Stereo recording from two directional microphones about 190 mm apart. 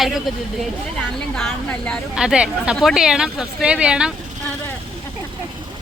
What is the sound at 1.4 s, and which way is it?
A woman's voice, centre (ahead or behind).